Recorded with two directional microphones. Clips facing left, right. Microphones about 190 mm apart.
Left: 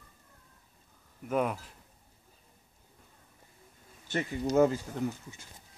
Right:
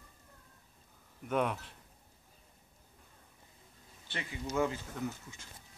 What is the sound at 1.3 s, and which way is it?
Speech, 5° left (ahead or behind).